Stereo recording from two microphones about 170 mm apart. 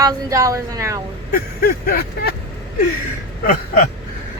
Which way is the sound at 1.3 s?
60° left (ahead or behind).